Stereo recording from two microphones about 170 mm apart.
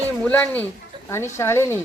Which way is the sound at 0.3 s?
10° left (ahead or behind).